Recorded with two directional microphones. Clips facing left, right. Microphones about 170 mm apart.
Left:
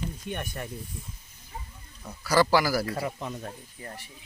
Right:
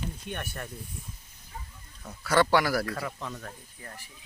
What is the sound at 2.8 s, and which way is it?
Speech, 25° left (ahead or behind).